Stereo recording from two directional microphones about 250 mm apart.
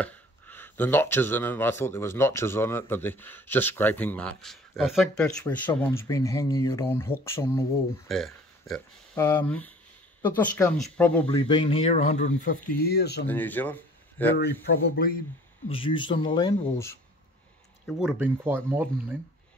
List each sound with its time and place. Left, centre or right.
0.0 s speech: centre
11.2 s speech: centre; by 13.3 s left
13.3 s speech: centre
15.0 s speech: left
15.7 s speech: left
17.8 s speech: centre